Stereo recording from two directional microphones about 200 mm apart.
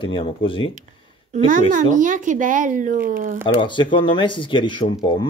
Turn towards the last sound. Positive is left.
turn(degrees=25)  # may be behind; listen again after turning